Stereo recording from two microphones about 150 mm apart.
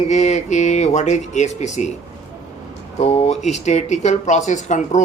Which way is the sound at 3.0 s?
45° left (ahead or behind).